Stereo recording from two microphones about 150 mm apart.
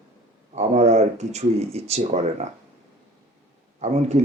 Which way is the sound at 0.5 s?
50° right (ahead or behind).